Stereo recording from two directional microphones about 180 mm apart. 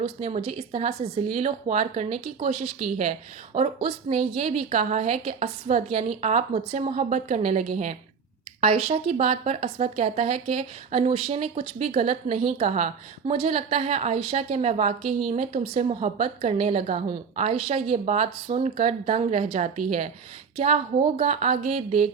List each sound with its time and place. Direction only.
0.0 s speech: 35° right (ahead or behind)
21.2 s speech: 40° right (ahead or behind)